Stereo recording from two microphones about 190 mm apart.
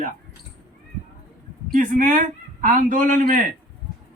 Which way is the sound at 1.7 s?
45° right (ahead or behind).